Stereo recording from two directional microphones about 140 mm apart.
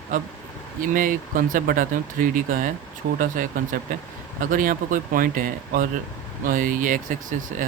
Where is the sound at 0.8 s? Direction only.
75° right (ahead or behind).